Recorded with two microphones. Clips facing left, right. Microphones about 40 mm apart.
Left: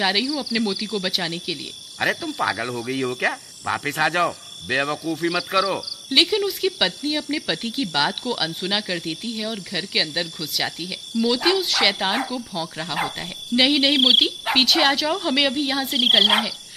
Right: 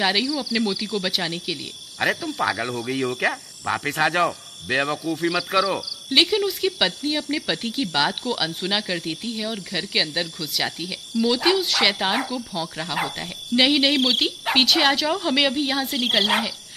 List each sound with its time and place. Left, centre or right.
0.0 s speech: centre